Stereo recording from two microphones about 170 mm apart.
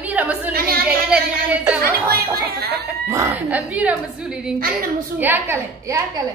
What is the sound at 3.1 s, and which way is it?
A woman's voice, 15° right (ahead or behind).